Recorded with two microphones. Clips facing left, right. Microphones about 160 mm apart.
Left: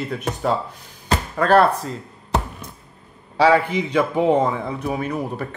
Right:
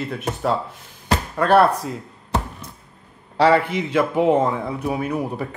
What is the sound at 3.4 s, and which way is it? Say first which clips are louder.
A man's voice: even; centre (ahead or behind).